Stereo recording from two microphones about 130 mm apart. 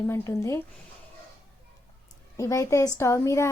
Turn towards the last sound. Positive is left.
turn(degrees=20)  # may be behind; listen again after turning